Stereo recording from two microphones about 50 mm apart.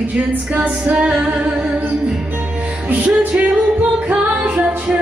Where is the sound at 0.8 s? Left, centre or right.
Right.